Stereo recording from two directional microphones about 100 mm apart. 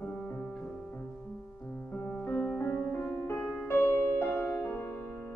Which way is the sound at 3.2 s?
20° left (ahead or behind).